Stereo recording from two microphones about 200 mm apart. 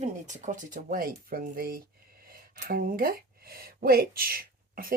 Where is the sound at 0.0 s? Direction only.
35° right (ahead or behind).